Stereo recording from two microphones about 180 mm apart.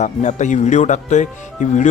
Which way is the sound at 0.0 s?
40° left (ahead or behind).